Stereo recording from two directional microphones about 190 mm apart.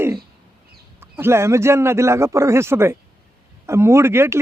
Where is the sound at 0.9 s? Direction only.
10° right (ahead or behind).